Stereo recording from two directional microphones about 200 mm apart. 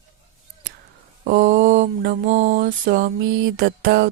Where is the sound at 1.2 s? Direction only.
45° right (ahead or behind).